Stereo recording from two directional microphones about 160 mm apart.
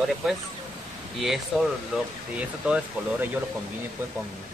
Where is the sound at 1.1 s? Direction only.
Centre (ahead or behind).